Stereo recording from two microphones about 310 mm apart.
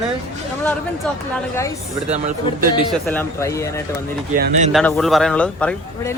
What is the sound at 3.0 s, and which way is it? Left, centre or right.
Speech, centre.